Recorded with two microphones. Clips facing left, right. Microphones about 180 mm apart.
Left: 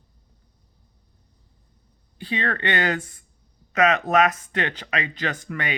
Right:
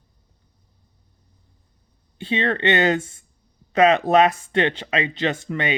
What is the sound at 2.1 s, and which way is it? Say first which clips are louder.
Speech: right 4 dB; 25° right (ahead or behind).